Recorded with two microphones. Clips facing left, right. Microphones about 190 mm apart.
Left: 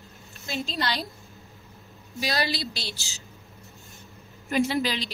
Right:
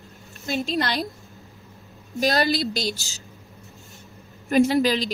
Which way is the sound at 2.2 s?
45° right (ahead or behind).